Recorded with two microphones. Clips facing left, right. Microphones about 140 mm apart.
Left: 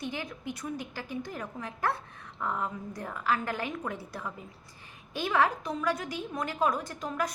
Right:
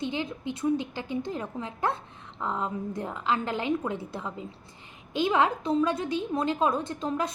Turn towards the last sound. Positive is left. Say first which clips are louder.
# right 4 dB
turn(degrees=-25)  # may be behind; listen again after turning